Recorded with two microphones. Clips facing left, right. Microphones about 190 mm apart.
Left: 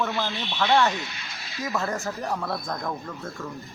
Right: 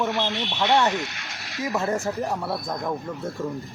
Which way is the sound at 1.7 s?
25° right (ahead or behind).